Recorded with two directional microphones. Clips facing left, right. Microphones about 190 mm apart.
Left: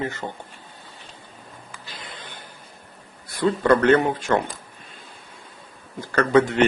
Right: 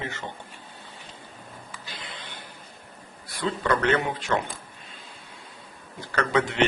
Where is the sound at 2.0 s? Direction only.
45° left (ahead or behind).